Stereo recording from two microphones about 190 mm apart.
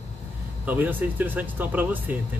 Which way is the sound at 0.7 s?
10° right (ahead or behind).